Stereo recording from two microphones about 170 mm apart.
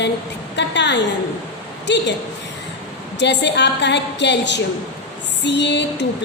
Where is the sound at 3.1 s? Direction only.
90° left.